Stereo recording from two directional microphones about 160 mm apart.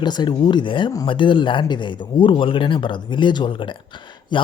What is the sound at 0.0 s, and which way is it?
Speech, 25° left (ahead or behind).